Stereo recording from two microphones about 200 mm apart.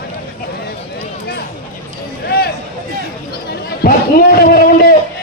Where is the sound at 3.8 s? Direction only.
50° left (ahead or behind).